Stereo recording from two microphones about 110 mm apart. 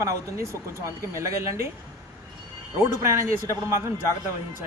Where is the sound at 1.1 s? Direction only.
25° right (ahead or behind).